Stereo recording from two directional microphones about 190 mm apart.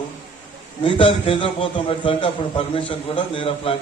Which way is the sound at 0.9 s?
25° left (ahead or behind).